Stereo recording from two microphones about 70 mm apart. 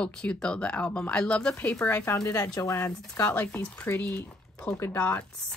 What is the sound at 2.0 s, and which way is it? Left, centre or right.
Speech, left.